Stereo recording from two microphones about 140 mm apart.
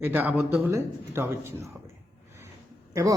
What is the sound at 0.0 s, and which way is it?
Speech, 15° right (ahead or behind).